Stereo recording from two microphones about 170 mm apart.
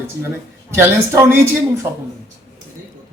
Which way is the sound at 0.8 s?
15° right (ahead or behind).